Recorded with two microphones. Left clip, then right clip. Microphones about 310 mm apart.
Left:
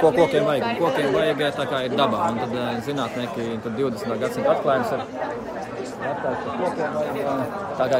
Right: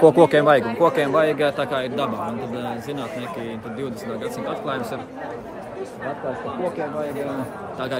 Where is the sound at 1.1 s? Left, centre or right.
Centre.